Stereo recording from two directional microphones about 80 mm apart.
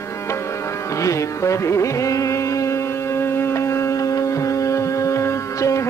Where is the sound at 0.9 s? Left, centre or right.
Left.